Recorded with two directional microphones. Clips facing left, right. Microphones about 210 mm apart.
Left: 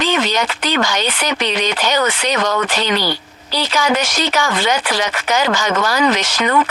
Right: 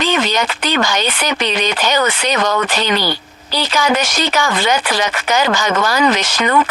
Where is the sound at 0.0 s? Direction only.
50° right (ahead or behind).